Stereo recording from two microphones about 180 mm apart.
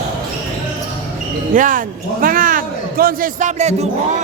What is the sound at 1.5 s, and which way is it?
A man's voice, 45° right (ahead or behind).